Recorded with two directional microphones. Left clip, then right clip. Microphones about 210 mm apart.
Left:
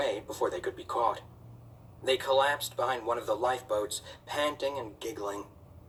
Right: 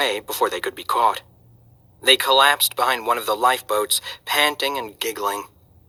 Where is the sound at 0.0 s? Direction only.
50° right (ahead or behind).